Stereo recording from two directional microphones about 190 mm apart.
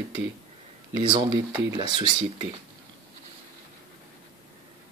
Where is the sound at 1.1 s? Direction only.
20° right (ahead or behind).